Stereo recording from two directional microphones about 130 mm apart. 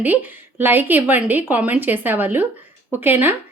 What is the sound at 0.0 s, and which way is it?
A woman's voice, 15° right (ahead or behind).